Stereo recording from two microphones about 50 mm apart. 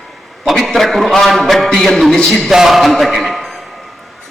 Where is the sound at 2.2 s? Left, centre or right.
Centre.